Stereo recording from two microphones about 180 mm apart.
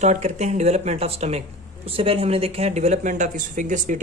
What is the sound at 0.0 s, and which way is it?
Speech, 40° right (ahead or behind).